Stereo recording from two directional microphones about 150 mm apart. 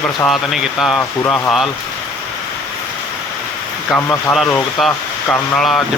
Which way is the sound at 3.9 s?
15° left (ahead or behind).